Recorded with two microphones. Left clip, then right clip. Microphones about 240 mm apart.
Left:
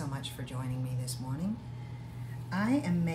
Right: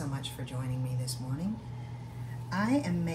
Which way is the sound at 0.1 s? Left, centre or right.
Centre.